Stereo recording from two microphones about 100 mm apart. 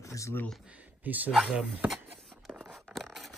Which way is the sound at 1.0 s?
15° right (ahead or behind).